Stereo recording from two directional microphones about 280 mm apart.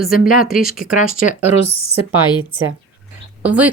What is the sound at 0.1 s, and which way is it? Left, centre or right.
Speech, left.